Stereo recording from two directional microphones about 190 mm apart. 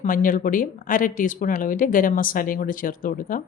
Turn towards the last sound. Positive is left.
turn(degrees=45)  # may be behind; listen again after turning